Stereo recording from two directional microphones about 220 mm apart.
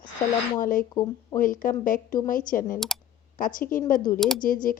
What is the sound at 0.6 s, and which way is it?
Speech, 40° left (ahead or behind).